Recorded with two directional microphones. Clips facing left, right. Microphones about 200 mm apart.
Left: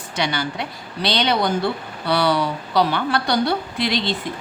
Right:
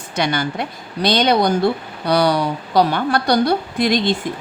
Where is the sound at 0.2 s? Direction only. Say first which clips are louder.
Right 4 dB; 50° right (ahead or behind).